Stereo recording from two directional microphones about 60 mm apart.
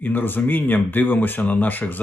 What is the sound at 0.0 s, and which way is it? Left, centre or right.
Speech, left.